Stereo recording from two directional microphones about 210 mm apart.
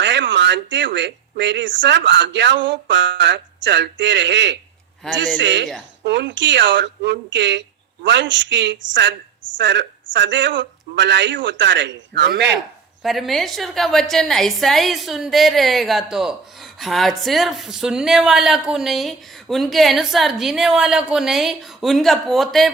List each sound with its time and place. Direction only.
0.0 s speech: 60° right (ahead or behind)
5.0 s speech: centre (ahead or behind)
5.4 s speech: 60° right (ahead or behind)
13.0 s speech: centre (ahead or behind)